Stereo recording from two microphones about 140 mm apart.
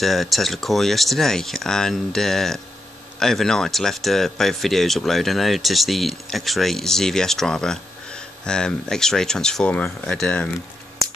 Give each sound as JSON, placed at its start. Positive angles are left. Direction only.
{"t": 0.0, "sound": "speech", "side_deg": 0}